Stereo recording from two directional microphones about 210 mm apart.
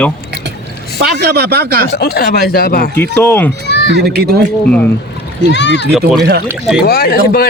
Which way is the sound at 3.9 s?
50° right (ahead or behind).